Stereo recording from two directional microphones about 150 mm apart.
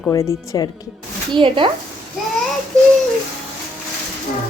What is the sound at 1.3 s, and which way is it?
Speech, 35° right (ahead or behind).